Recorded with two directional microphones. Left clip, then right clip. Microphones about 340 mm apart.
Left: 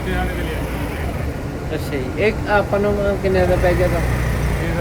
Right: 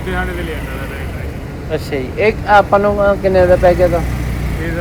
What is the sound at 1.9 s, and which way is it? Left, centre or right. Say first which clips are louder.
Speech: right 4 dB; centre.